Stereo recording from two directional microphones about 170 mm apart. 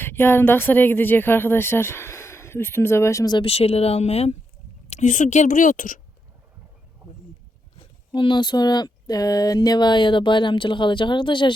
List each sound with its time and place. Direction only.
0.0 s speech: 15° left (ahead or behind); by 6.0 s 50° left (ahead or behind)
7.8 s speech: 30° left (ahead or behind)